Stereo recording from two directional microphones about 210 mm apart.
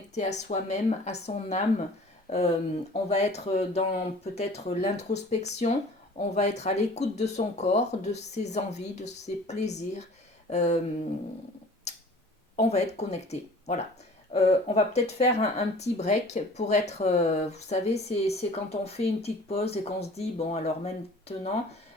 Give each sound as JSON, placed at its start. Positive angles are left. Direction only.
{"t": 0.1, "sound": "speech", "side_deg": 35}
{"t": 11.9, "sound": "tick-tock", "side_deg": 30}
{"t": 12.5, "sound": "speech", "side_deg": 30}